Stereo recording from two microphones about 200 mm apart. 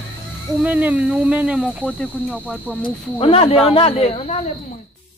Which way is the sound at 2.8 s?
30° left (ahead or behind).